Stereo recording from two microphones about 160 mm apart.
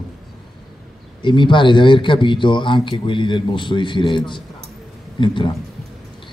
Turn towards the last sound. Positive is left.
turn(degrees=30)  # may be behind; listen again after turning